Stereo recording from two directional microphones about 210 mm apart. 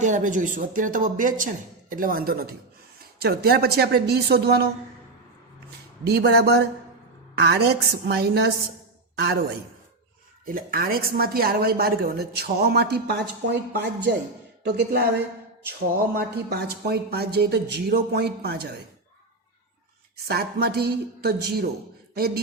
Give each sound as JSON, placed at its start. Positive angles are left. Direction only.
{"t": 0.0, "sound": "a woman's voice", "side_deg": -35}
{"t": 6.1, "sound": "a woman's voice", "side_deg": -50}
{"t": 10.4, "sound": "a woman's voice", "side_deg": -45}
{"t": 16.1, "sound": "a woman's voice", "side_deg": -50}
{"t": 20.1, "sound": "a woman's voice", "side_deg": -50}